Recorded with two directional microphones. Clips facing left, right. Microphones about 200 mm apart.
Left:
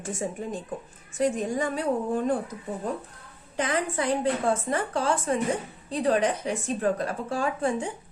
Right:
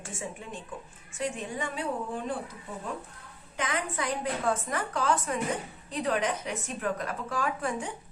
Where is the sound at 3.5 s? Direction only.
35° left (ahead or behind).